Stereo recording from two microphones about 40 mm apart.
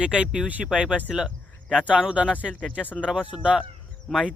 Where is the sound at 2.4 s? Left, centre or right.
Centre.